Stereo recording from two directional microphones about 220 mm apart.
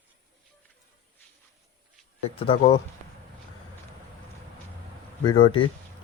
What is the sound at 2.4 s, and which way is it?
Speech, 25° left (ahead or behind).